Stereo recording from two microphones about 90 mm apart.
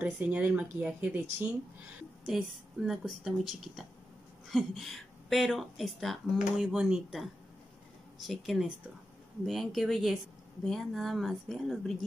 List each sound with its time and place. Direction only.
0.0 s speech: 15° right (ahead or behind)
2.2 s speech: 5° right (ahead or behind)
8.2 s speech: centre (ahead or behind)